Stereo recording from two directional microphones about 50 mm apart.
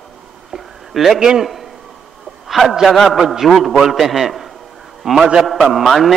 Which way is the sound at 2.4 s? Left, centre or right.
Centre.